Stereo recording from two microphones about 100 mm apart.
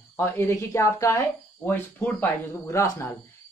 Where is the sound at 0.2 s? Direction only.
30° left (ahead or behind).